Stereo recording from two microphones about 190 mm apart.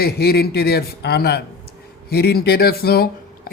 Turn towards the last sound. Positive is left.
turn(degrees=55)  # may be behind; listen again after turning